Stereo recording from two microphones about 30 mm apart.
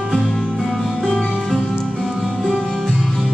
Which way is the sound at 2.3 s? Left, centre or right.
Centre.